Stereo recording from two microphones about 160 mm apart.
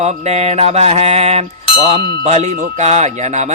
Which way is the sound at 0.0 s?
45° right (ahead or behind).